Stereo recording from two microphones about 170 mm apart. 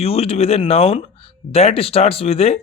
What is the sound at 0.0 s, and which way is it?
Speech, 35° left (ahead or behind).